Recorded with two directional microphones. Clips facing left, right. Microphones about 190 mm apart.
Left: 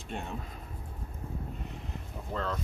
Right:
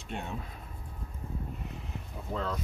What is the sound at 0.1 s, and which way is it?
Speech, centre (ahead or behind).